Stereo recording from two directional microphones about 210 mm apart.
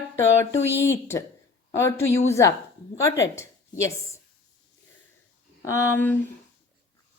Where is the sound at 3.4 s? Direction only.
15° left (ahead or behind).